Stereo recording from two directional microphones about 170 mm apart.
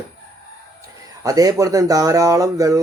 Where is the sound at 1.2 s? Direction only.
20° right (ahead or behind).